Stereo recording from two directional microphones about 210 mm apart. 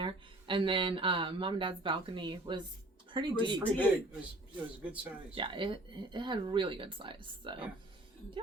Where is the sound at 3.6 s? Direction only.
5° left (ahead or behind).